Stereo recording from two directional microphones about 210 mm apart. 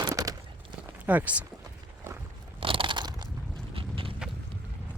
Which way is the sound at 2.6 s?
25° right (ahead or behind).